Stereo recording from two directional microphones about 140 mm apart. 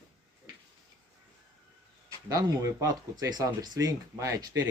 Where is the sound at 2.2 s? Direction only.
25° right (ahead or behind).